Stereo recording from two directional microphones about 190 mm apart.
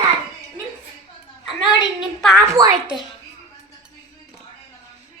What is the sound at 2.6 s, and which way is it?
Speech, 20° right (ahead or behind).